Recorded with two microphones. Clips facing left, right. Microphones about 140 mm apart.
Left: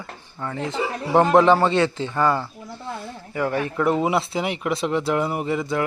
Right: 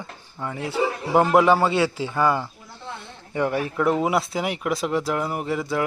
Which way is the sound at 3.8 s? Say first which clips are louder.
Even; centre (ahead or behind).